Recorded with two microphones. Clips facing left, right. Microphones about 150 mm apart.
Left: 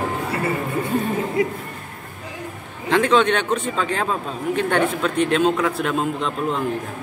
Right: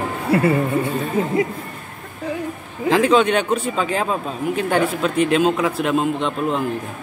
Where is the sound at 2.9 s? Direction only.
10° right (ahead or behind).